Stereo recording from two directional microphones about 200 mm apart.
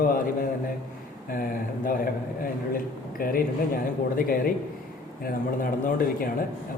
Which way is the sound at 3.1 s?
45° left (ahead or behind).